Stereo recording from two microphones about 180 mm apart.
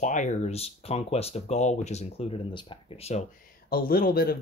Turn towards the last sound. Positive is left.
turn(degrees=55)  # may be behind; listen again after turning